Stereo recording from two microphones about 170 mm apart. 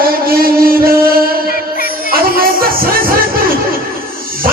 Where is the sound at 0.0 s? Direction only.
60° right (ahead or behind).